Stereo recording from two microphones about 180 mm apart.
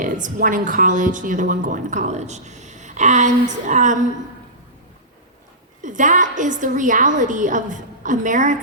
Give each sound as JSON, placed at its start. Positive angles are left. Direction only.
{"t": 0.0, "sound": "a woman's voice", "side_deg": -50}
{"t": 5.8, "sound": "a woman's voice", "side_deg": -45}